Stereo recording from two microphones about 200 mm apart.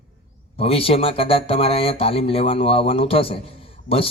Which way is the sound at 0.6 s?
30° left (ahead or behind).